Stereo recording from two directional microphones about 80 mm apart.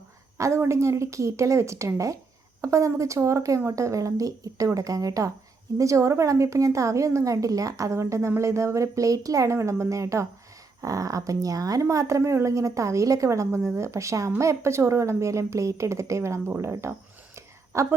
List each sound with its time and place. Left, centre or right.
0.3 s speech: right